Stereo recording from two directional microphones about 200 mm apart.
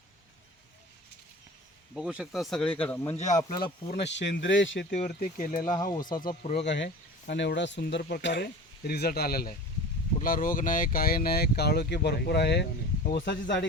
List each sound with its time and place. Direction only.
2.0 s speech: 5° right (ahead or behind)
3.2 s speech: 35° left (ahead or behind)
4.0 s speech: 60° left (ahead or behind)
4.9 s speech: 40° left (ahead or behind)
6.7 s speech: 60° left (ahead or behind)